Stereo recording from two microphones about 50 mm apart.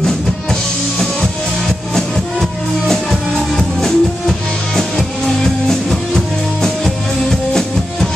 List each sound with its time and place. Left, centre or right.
0.0 s music: centre
2.9 s music: centre